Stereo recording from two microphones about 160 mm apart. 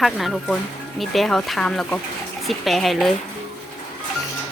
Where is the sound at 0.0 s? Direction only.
Centre (ahead or behind).